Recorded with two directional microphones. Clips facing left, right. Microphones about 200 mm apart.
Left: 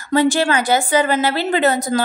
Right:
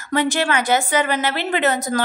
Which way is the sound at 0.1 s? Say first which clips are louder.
Left 4 dB; 35° left (ahead or behind).